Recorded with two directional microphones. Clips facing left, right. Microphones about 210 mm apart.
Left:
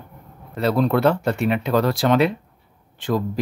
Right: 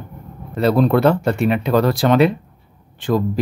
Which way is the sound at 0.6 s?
35° right (ahead or behind).